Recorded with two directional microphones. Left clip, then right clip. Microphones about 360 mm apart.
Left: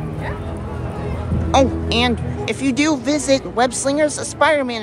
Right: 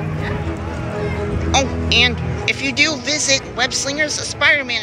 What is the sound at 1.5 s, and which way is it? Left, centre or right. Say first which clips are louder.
Speech: left 1 dB; left.